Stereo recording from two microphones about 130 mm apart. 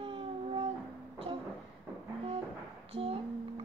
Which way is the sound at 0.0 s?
45° right (ahead or behind).